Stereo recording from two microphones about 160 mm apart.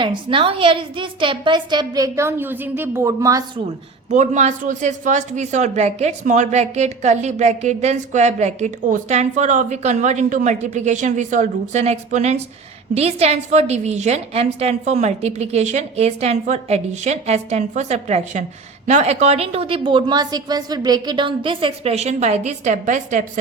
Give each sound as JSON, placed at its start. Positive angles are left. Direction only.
{"t": 0.0, "sound": "a woman's voice", "side_deg": -30}
{"t": 4.1, "sound": "a woman's voice", "side_deg": -50}